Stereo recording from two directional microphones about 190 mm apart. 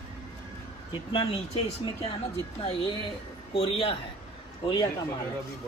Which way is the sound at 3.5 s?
30° left (ahead or behind).